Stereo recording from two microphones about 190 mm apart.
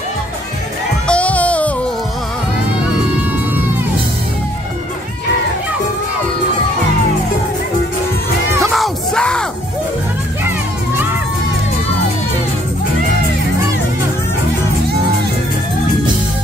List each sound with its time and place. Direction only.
1.0 s music: 5° left (ahead or behind)
8.7 s yell: centre (ahead or behind)